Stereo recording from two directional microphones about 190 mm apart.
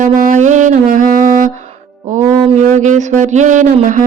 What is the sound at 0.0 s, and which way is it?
Music, 40° right (ahead or behind).